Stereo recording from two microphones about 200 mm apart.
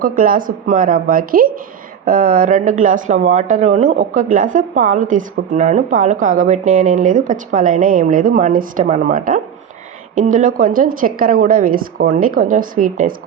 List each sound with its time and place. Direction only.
0.0 s a woman's voice: 45° right (ahead or behind)